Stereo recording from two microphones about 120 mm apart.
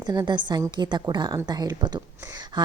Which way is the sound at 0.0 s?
40° right (ahead or behind).